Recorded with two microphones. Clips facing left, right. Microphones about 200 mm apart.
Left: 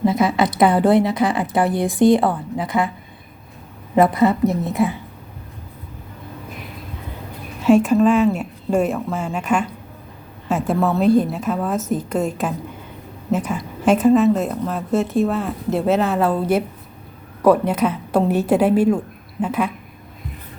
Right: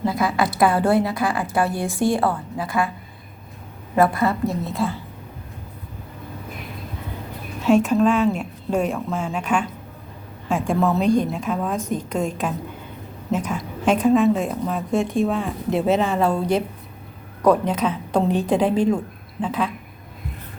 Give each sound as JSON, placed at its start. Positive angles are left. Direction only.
{"t": 0.0, "sound": "a woman's voice", "side_deg": 20}
{"t": 3.9, "sound": "a woman's voice", "side_deg": 20}
{"t": 7.6, "sound": "a woman's voice", "side_deg": 10}